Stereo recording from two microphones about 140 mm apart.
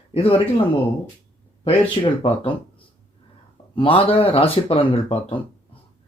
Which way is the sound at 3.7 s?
40° left (ahead or behind).